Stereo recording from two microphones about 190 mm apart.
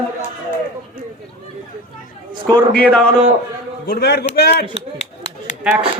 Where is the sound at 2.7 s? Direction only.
5° left (ahead or behind).